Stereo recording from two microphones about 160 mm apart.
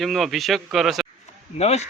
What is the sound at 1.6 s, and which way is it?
Speech, 40° left (ahead or behind).